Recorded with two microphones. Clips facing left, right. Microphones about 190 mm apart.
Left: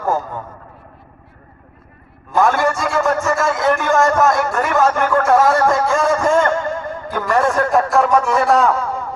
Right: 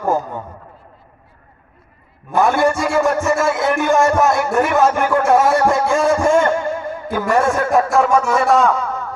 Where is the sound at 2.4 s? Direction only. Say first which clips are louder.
Right 1 dB; 10° right (ahead or behind).